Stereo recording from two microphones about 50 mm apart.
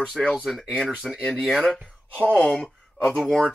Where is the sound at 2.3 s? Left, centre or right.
Left.